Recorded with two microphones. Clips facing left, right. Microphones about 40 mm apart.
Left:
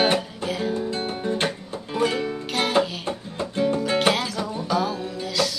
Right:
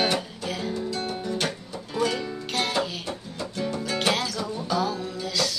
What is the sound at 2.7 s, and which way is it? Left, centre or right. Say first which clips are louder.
Music: left 5 dB; left.